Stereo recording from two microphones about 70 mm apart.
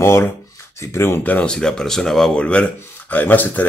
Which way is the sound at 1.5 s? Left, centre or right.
Centre.